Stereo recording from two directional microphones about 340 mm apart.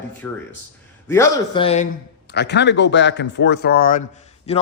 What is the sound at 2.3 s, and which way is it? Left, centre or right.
A man's voice, left.